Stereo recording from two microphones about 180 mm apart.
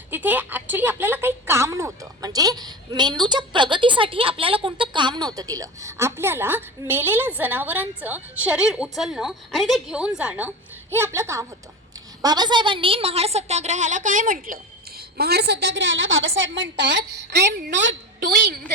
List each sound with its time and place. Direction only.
0.1 s a woman's voice: 10° right (ahead or behind); by 17.9 s 70° right (ahead or behind)